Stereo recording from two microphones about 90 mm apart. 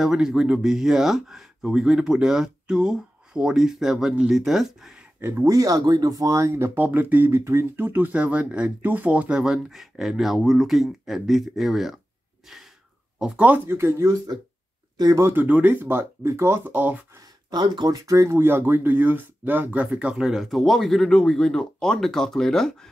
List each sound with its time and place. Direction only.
0.0 s speech: 5° right (ahead or behind)
5.2 s speech: 30° right (ahead or behind)
5.5 s speech: 40° right (ahead or behind); by 11.9 s 5° right (ahead or behind)
13.2 s speech: 15° right (ahead or behind)
13.7 s speech: 30° right (ahead or behind)
15.2 s speech: 20° right (ahead or behind)
17.5 s speech: 55° right (ahead or behind); by 22.8 s 5° left (ahead or behind)